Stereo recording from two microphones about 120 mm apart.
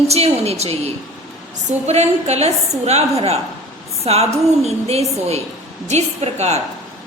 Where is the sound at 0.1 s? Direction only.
60° right (ahead or behind).